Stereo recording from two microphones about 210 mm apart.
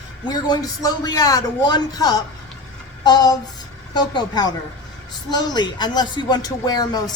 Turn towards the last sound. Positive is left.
turn(degrees=20)  # may be behind; listen again after turning